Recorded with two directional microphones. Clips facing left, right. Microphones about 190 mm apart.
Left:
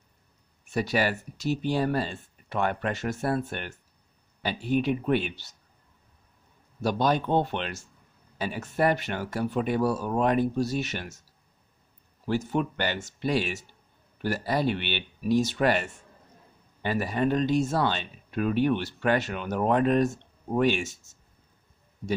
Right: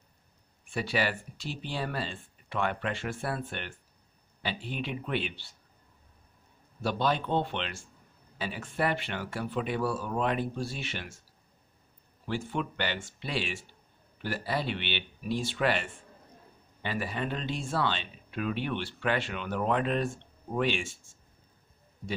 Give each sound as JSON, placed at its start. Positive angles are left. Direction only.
{"t": 0.7, "sound": "a man's voice", "side_deg": 45}
{"t": 6.8, "sound": "a man's voice", "side_deg": 45}
{"t": 12.3, "sound": "a man's voice", "side_deg": 40}